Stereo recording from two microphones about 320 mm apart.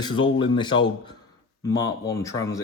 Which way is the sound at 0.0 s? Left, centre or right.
Centre.